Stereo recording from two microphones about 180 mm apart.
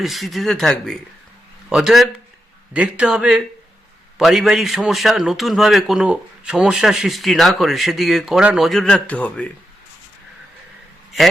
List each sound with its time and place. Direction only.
0.0 s a man's voice: centre (ahead or behind)